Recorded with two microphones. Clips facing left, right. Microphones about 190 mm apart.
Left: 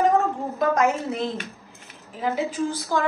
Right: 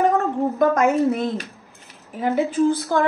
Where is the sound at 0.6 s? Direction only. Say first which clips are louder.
Right 3 dB; 55° right (ahead or behind).